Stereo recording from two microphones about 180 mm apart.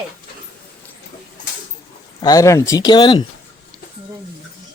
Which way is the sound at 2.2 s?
20° left (ahead or behind).